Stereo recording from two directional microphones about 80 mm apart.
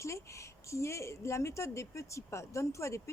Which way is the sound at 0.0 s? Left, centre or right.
Left.